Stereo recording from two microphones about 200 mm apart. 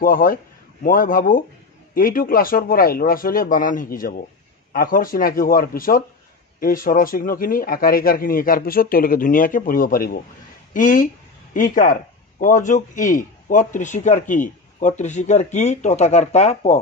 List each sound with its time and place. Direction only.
0.0 s speech: 45° left (ahead or behind)